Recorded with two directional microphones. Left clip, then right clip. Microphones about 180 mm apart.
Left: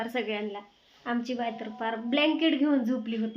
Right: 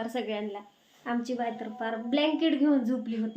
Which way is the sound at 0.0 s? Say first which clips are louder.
Left 1 dB; 10° left (ahead or behind).